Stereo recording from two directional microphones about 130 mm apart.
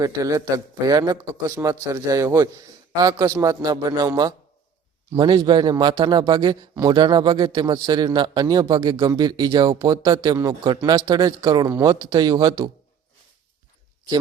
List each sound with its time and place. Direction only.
0.0 s a man's voice: 25° right (ahead or behind)